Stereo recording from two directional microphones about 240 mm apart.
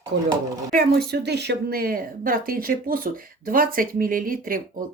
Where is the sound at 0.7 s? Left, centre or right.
Right.